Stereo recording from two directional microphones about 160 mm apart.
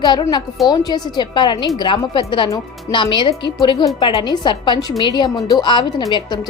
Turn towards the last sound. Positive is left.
turn(degrees=25)  # may be behind; listen again after turning